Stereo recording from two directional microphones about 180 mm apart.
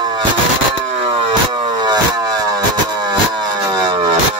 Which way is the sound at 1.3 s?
25° right (ahead or behind).